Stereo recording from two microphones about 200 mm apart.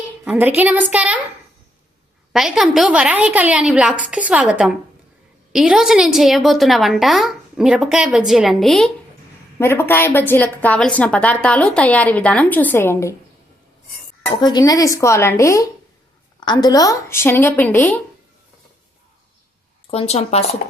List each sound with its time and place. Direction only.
0.3 s a woman's voice: 10° right (ahead or behind)
2.3 s a woman's voice: centre (ahead or behind)
9.6 s a woman's voice: 10° left (ahead or behind)
14.3 s a woman's voice: 15° left (ahead or behind)
19.9 s a woman's voice: 30° left (ahead or behind)
20.6 s speech: 45° left (ahead or behind)